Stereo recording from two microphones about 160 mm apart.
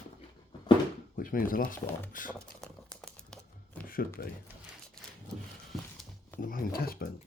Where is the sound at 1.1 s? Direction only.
60° left (ahead or behind).